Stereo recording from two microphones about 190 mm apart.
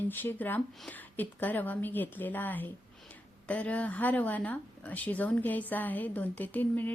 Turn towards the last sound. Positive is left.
turn(degrees=10)  # may be behind; listen again after turning